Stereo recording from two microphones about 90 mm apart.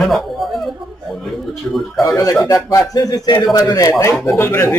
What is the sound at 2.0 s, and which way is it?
Speech, 40° left (ahead or behind).